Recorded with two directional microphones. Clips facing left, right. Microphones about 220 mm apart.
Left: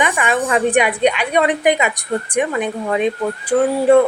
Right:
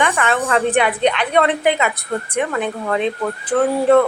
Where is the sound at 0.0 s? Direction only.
15° left (ahead or behind).